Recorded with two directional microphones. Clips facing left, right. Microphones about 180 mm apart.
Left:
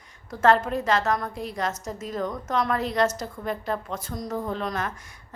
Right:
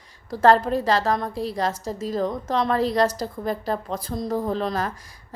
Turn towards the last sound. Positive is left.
turn(degrees=-35)  # may be behind; listen again after turning